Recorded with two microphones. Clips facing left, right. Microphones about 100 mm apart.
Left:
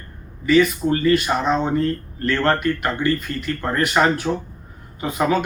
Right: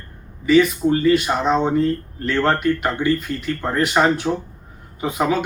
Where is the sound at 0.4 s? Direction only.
20° right (ahead or behind).